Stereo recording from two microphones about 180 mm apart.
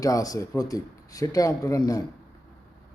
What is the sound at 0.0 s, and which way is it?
A man's voice, 20° left (ahead or behind).